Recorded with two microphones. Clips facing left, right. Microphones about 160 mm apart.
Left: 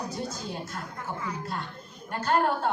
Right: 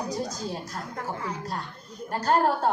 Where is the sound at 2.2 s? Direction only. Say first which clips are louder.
Right 2 dB; 40° right (ahead or behind).